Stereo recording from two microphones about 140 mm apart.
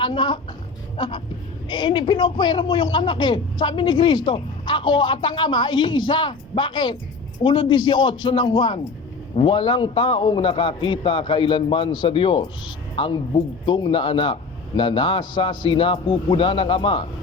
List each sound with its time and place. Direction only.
0.0 s a man's voice: 35° left (ahead or behind)
0.9 s a sound: 35° left (ahead or behind)
1.7 s a man's voice: 35° left (ahead or behind)